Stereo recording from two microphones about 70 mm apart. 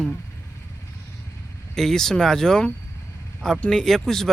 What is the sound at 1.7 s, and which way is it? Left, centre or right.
Speech, centre.